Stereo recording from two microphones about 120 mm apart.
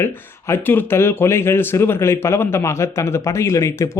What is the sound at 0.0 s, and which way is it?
Speech, 20° left (ahead or behind).